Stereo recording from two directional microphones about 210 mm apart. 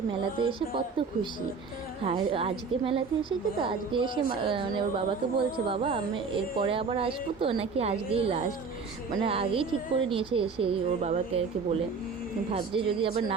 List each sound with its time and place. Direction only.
0.1 s a woman's voice: 25° right (ahead or behind)